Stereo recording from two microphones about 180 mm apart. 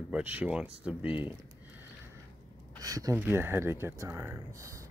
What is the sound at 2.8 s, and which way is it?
Speech, 20° right (ahead or behind).